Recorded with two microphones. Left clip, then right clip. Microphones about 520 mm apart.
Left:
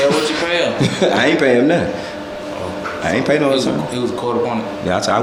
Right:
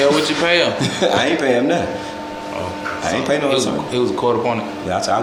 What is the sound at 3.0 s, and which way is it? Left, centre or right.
Speech, centre.